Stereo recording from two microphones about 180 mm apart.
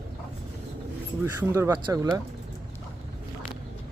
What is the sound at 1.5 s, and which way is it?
Speech, 20° right (ahead or behind).